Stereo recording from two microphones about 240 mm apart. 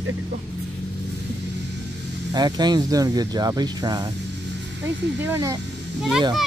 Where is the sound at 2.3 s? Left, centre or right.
Centre.